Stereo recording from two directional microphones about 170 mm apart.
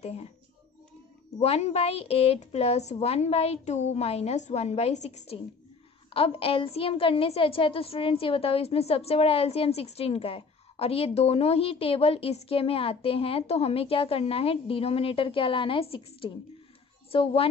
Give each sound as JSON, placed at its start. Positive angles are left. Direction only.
{"t": 0.0, "sound": "speech", "side_deg": 35}
{"t": 1.4, "sound": "a woman's voice", "side_deg": 40}